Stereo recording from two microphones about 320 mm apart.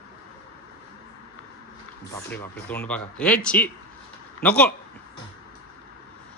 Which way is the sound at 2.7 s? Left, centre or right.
Centre.